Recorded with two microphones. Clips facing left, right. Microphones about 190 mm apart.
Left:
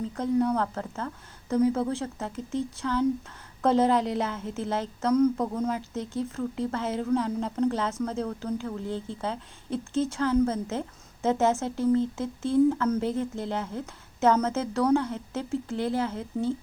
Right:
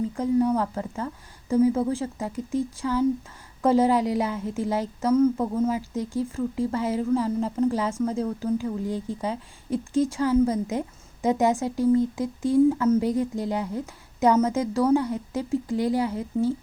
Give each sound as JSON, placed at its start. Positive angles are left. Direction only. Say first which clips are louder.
{"t": 0.2, "sound": "a woman's voice", "louder": "right 2 dB", "side_deg": -10}